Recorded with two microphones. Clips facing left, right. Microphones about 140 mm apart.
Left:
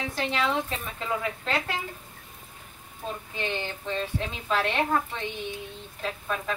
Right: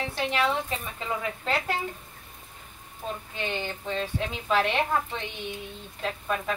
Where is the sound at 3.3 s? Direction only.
5° right (ahead or behind).